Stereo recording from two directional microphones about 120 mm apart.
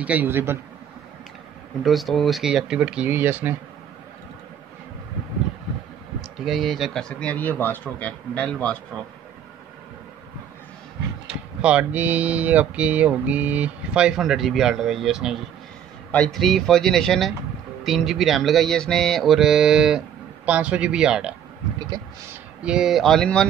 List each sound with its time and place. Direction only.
0.0 s speech: 15° right (ahead or behind)
1.8 s mantra: centre (ahead or behind)
3.1 s speech: 15° right (ahead or behind)
6.4 s speech: centre (ahead or behind)
11.6 s speech: 10° right (ahead or behind)
16.1 s mantra: 5° left (ahead or behind)
20.4 s speech: 10° right (ahead or behind)
22.6 s mantra: 5° right (ahead or behind)